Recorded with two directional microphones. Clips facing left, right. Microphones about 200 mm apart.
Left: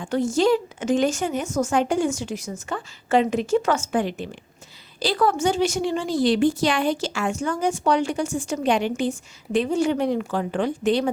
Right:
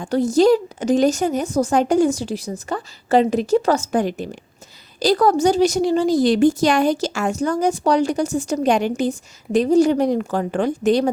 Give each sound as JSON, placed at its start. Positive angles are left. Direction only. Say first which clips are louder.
{"t": 0.0, "sound": "a woman's voice", "louder": "right 5 dB", "side_deg": -35}